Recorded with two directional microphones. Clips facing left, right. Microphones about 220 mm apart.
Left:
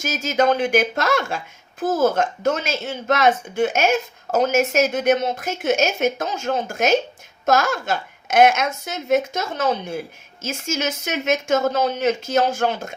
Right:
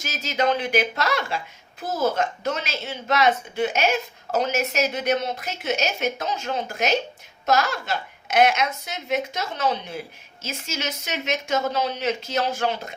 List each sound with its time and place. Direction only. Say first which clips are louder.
0.0 s a woman's voice: left 5 dB; 50° left (ahead or behind)